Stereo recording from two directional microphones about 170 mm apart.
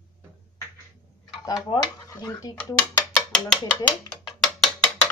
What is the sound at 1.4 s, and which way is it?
Speech, 20° left (ahead or behind).